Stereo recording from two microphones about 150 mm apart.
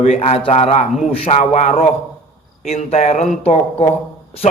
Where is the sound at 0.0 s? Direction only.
45° left (ahead or behind).